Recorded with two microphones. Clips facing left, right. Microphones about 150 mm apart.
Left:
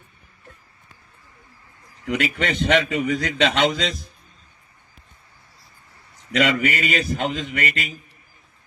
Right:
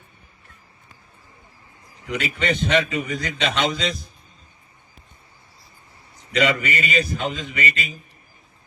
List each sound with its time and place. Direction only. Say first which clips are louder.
2.0 s a man's voice: left 1 dB; 90° left
6.3 s speech: left 1 dB; 90° left